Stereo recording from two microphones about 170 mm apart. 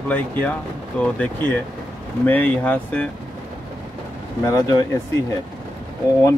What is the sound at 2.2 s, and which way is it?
Speech, 10° left (ahead or behind).